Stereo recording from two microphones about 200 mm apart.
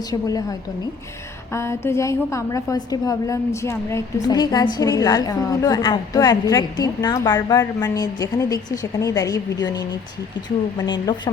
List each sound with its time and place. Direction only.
0.1 s speech: 20° left (ahead or behind)
1.5 s a woman's voice: 15° left (ahead or behind)